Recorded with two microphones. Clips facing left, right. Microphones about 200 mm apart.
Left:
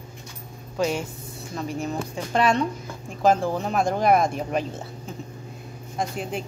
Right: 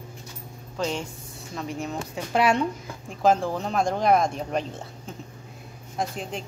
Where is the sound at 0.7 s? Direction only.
10° left (ahead or behind).